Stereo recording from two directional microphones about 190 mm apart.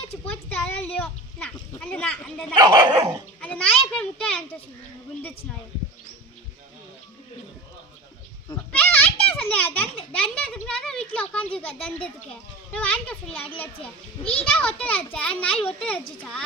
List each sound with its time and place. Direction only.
0.3 s a sound: 10° left (ahead or behind)
2.6 s speech: 20° right (ahead or behind)
3.4 s a child's voice: 5° left (ahead or behind)
8.7 s children playing: 10° left (ahead or behind)
9.3 s a child's voice: 10° left (ahead or behind)
14.6 s a child's voice: 5° left (ahead or behind)